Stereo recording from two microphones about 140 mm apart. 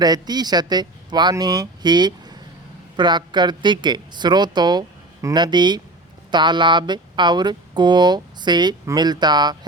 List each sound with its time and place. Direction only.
0.0 s speech: 30° right (ahead or behind)